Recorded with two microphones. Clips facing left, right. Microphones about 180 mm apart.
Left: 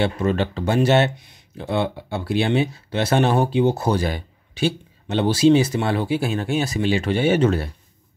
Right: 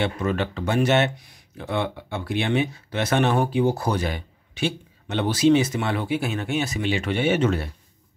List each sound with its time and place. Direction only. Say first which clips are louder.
0.0 s speech: left 3 dB; 30° left (ahead or behind)